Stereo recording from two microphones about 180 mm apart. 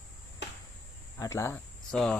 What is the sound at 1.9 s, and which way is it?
Speech, 5° left (ahead or behind).